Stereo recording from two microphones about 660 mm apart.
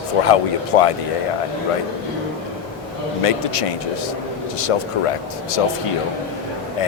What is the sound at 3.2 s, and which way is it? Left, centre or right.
Speech, left.